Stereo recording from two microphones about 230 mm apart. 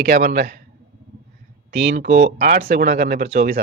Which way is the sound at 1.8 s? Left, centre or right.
Right.